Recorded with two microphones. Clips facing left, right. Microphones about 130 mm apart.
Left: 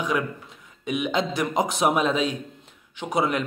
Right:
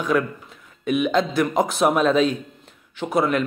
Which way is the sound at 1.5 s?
15° left (ahead or behind).